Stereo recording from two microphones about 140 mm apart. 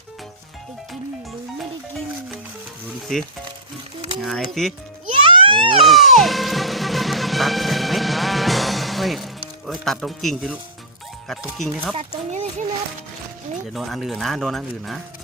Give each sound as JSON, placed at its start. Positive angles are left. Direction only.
{"t": 4.2, "sound": "speech", "side_deg": 0}
{"t": 5.2, "sound": "a sound", "side_deg": -40}
{"t": 5.8, "sound": "music", "side_deg": 0}
{"t": 11.3, "sound": "speech", "side_deg": 0}
{"t": 11.9, "sound": "a sound", "side_deg": -55}
{"t": 13.7, "sound": "speech", "side_deg": 0}